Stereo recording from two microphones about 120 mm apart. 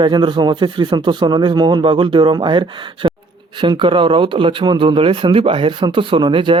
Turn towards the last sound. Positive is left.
turn(degrees=-45)  # may be behind; listen again after turning